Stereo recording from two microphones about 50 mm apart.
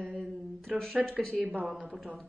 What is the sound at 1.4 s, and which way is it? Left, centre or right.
Speech, right.